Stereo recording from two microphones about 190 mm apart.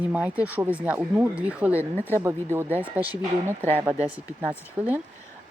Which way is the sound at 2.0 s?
10° left (ahead or behind).